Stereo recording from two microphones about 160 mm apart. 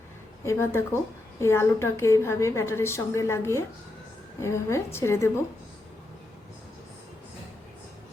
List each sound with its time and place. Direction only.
0.4 s a woman's voice: 15° left (ahead or behind)